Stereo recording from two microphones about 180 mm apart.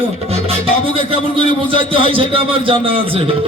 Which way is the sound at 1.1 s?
30° right (ahead or behind).